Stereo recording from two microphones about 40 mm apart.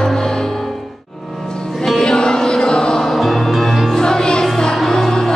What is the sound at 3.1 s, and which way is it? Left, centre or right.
Music, centre.